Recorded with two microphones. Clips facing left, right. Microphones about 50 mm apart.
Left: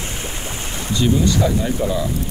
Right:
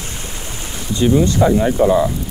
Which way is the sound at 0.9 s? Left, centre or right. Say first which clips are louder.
Right 3 dB; right.